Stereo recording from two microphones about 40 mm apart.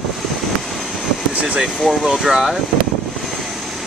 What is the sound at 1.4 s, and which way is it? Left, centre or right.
Speech, centre.